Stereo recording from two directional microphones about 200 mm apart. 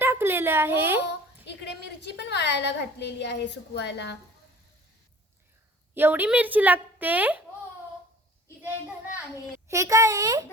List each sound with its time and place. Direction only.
0.0 s a sound: 10° right (ahead or behind)
1.5 s a woman's voice: 60° left (ahead or behind)
5.9 s a woman's voice: 10° right (ahead or behind)
9.6 s a woman's voice: 15° right (ahead or behind)